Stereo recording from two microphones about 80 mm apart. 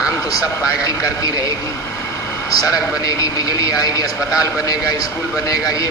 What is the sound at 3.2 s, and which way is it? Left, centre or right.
Speech, left.